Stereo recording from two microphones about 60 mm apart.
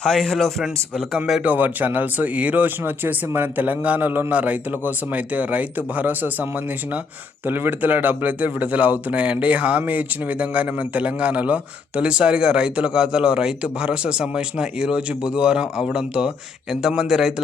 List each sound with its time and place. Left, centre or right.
0.0 s a man's voice: centre
1.5 s a man's voice: right; by 17.3 s centre